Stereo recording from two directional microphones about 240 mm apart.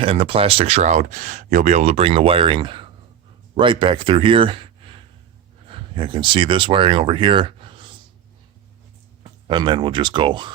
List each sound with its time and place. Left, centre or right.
0.0 s speech: right
9.5 s speech: centre